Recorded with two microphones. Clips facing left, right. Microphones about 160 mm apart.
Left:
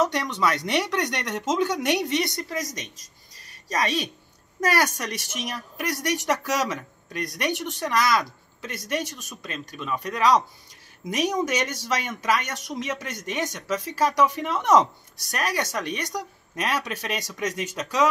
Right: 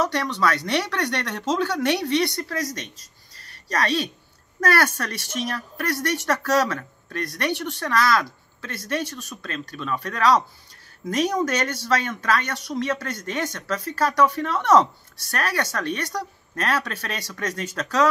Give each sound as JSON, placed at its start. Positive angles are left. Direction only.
{"t": 0.0, "sound": "speech", "side_deg": 20}
{"t": 3.3, "sound": "a sound", "side_deg": 15}
{"t": 4.6, "sound": "speech", "side_deg": 15}